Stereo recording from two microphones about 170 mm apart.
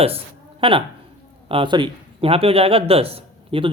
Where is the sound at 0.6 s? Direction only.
30° right (ahead or behind).